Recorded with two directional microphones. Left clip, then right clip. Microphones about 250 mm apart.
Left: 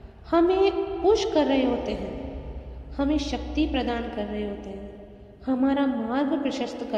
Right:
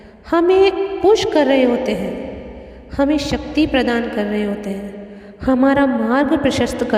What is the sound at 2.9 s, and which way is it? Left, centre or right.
A woman's voice, right.